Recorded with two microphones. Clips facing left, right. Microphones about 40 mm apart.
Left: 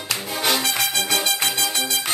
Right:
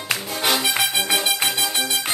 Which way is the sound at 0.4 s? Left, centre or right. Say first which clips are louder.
Even; centre.